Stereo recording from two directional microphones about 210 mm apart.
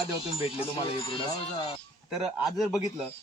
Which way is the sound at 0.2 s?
25° left (ahead or behind).